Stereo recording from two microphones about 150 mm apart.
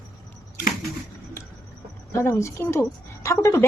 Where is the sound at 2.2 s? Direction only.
20° left (ahead or behind).